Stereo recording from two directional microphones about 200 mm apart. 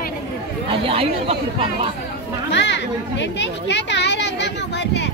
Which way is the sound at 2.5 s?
60° left (ahead or behind).